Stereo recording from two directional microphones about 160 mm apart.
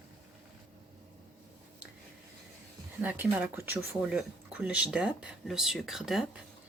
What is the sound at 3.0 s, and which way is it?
Speech, 10° right (ahead or behind).